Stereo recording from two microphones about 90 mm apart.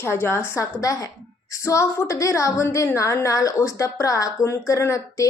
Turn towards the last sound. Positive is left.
turn(degrees=35)  # may be behind; listen again after turning